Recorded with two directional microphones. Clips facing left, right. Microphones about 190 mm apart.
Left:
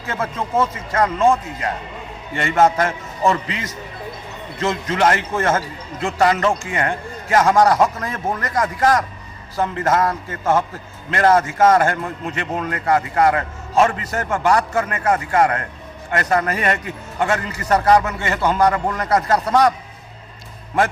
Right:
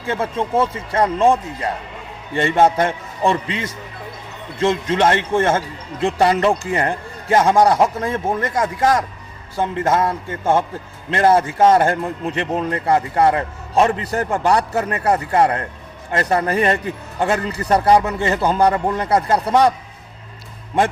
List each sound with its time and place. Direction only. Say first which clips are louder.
0.0 s a man's voice: right 3 dB; 30° right (ahead or behind)